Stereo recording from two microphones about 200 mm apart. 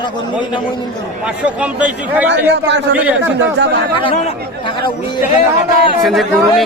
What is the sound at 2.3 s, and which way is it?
A man's voice, 60° right (ahead or behind).